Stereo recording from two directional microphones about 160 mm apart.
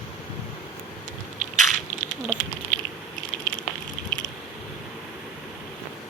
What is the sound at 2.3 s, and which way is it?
Typing, 55° right (ahead or behind).